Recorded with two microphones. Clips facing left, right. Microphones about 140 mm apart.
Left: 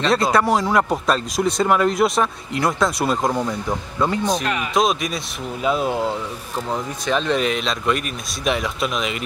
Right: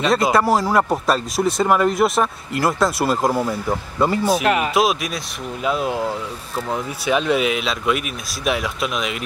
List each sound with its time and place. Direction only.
0.0 s speech: 5° right (ahead or behind)